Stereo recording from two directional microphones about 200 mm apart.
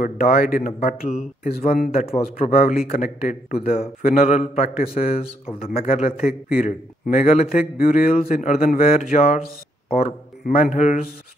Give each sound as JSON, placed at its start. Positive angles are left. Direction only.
{"t": 0.0, "sound": "speech", "side_deg": 40}
{"t": 2.0, "sound": "speech", "side_deg": 30}
{"t": 5.7, "sound": "speech", "side_deg": 45}
{"t": 10.4, "sound": "speech", "side_deg": 40}